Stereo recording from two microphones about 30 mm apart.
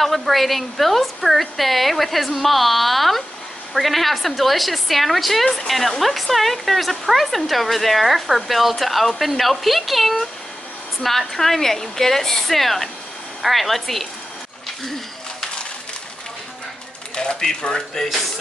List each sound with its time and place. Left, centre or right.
0.0 s a woman's voice: centre
17.1 s speech: left